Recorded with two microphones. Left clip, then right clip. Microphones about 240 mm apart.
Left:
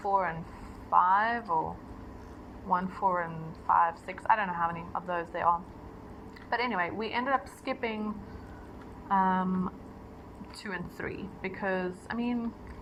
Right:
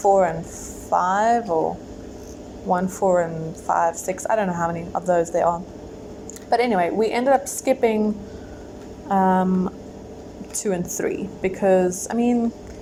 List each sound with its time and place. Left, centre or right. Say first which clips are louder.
0.0 s a woman's voice: right 12 dB; right
2.6 s a woman's voice: right 8 dB; right
9.0 s a woman's voice: right 8 dB; right